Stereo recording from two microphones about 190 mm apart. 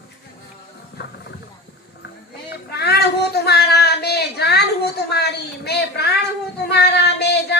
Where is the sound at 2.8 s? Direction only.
60° left (ahead or behind).